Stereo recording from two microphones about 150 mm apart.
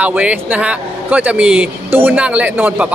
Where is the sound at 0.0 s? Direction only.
10° right (ahead or behind).